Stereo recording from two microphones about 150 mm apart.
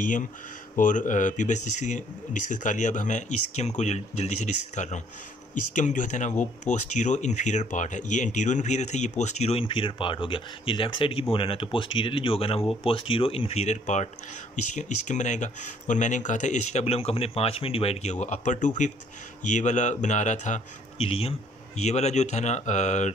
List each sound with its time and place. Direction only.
0.7 s speech: 60° left (ahead or behind)